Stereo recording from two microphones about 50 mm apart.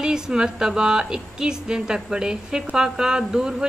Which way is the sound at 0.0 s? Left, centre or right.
Centre.